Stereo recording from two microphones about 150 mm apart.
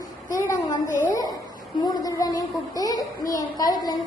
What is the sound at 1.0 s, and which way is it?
A child's voice, 25° left (ahead or behind).